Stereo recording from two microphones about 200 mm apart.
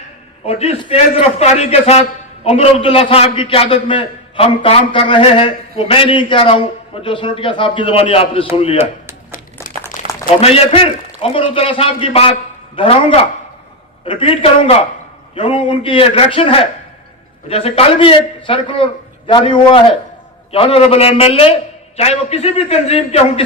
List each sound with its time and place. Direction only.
0.4 s a man's voice: 30° left (ahead or behind)
10.4 s a man's voice: 30° left (ahead or behind)